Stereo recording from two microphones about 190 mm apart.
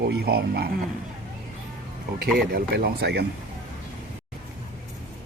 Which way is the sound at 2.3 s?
55° right (ahead or behind).